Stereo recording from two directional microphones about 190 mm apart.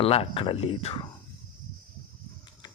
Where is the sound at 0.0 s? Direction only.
30° left (ahead or behind).